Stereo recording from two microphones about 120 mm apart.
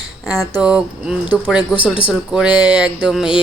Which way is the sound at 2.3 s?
5° right (ahead or behind).